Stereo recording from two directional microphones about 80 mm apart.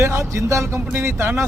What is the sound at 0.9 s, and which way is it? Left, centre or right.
Speech, right.